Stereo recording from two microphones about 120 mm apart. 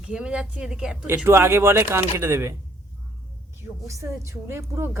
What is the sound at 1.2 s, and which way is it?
A woman's voice, 20° right (ahead or behind).